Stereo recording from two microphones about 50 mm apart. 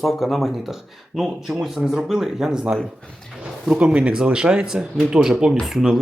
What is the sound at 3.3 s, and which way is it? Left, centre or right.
Speech, centre.